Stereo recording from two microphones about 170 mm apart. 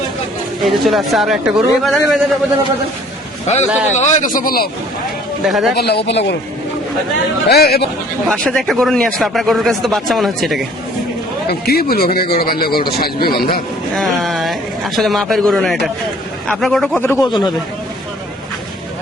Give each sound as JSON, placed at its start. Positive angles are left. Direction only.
{"t": 0.6, "sound": "speech", "side_deg": 0}
{"t": 3.4, "sound": "speech", "side_deg": 40}
{"t": 5.5, "sound": "speech", "side_deg": 0}
{"t": 5.7, "sound": "speech", "side_deg": 70}
{"t": 6.1, "sound": "a man's voice", "side_deg": 90}
{"t": 7.5, "sound": "speech", "side_deg": 70}
{"t": 8.3, "sound": "speech", "side_deg": 0}
{"t": 11.6, "sound": "speech", "side_deg": 65}
{"t": 13.9, "sound": "speech", "side_deg": 0}
{"t": 17.2, "sound": "speech", "side_deg": 25}